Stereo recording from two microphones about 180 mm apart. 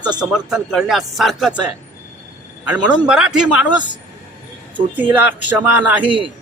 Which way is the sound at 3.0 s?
5° right (ahead or behind).